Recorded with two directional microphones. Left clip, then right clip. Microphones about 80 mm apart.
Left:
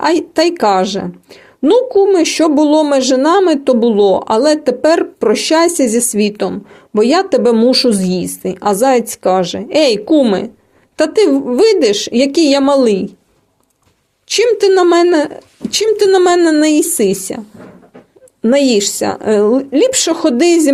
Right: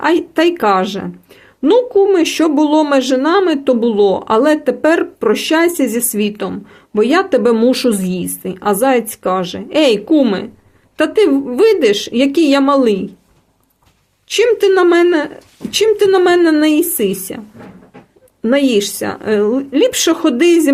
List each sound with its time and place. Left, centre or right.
0.0 s a woman's voice: left
7.5 s a woman's voice: left
14.3 s a woman's voice: left
18.5 s a woman's voice: left